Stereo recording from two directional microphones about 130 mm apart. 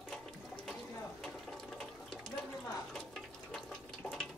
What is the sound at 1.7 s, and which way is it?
Water, 5° left (ahead or behind).